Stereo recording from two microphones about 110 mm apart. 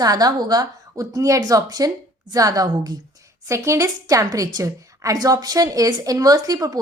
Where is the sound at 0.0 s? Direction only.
35° right (ahead or behind).